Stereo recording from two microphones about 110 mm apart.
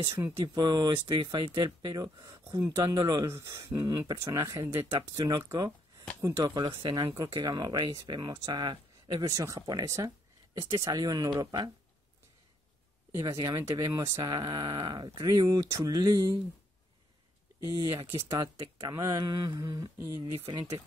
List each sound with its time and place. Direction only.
0.0 s speech: 30° right (ahead or behind)
0.7 s speech: 40° right (ahead or behind)
3.3 s speech: 25° right (ahead or behind); by 11.7 s 40° right (ahead or behind)
13.2 s speech: 35° right (ahead or behind)
17.6 s speech: 30° right (ahead or behind)